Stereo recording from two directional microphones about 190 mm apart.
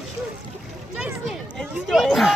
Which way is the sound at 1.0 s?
5° right (ahead or behind).